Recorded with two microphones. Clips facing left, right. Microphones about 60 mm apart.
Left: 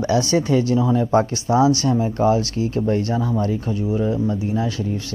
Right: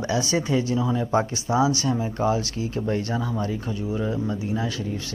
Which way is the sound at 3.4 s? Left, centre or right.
Left.